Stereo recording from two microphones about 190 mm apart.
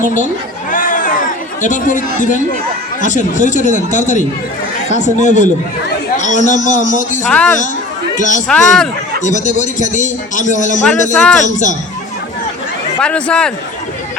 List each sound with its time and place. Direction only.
0.0 s a man's voice: 40° left (ahead or behind)
0.7 s a sound: 45° left (ahead or behind)
1.6 s a man's voice: 40° left (ahead or behind)
7.3 s a man's voice: 5° left (ahead or behind)
8.1 s a man's voice: 40° left (ahead or behind)
8.4 s a man's voice: 5° left (ahead or behind)
9.2 s a man's voice: 40° left (ahead or behind)
10.8 s a man's voice: 5° left (ahead or behind)
11.4 s a man's voice: 40° left (ahead or behind)
13.0 s a man's voice: 5° left (ahead or behind)